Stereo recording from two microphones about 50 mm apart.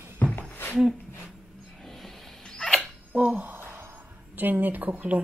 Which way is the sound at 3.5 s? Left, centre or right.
Right.